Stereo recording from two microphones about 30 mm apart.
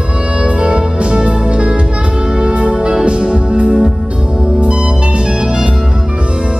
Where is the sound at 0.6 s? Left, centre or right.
Right.